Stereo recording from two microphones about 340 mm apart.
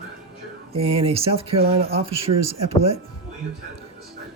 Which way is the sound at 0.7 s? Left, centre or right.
Centre.